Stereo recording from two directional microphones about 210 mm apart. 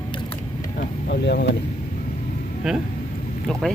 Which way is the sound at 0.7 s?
55° left (ahead or behind).